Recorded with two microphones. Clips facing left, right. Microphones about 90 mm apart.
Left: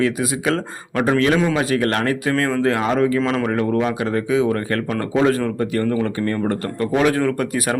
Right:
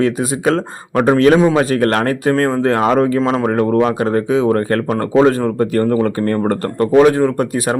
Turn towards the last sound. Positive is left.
turn(degrees=-30)  # may be behind; listen again after turning